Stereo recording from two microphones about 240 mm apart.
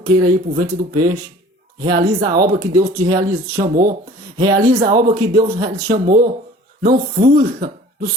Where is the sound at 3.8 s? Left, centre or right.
Right.